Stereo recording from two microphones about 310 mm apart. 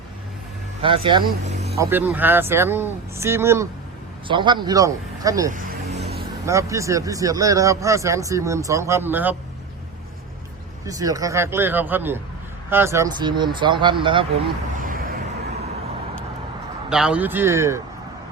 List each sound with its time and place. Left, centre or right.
0.8 s speech: centre
1.8 s speech: centre
5.5 s music: right
6.4 s speech: centre
10.8 s speech: centre
14.8 s vehicle: right
16.9 s speech: centre